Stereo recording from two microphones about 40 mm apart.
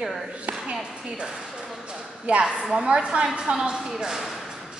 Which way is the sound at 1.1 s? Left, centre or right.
Right.